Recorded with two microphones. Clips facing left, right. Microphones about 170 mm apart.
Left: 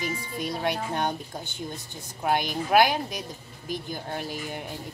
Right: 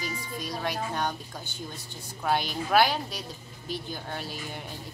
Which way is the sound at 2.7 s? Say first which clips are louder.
Left 2 dB; 15° left (ahead or behind).